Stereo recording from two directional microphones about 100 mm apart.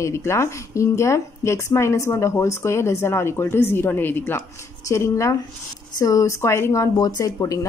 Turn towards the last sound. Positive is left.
turn(degrees=35)  # may be behind; listen again after turning